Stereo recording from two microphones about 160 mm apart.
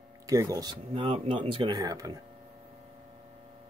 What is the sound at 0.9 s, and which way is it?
Speech, 40° right (ahead or behind).